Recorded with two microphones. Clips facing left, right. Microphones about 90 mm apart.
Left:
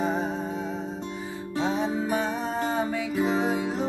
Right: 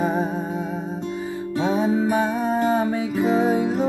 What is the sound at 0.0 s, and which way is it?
Music, 55° right (ahead or behind).